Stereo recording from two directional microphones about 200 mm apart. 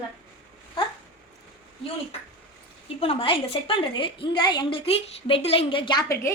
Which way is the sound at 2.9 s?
25° left (ahead or behind).